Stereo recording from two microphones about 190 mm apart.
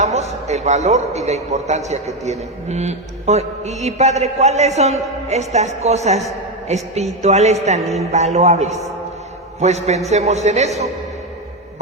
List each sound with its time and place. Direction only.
0.0 s a man's voice: 35° right (ahead or behind)